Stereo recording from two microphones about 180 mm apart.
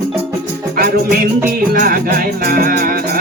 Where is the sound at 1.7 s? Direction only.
50° right (ahead or behind).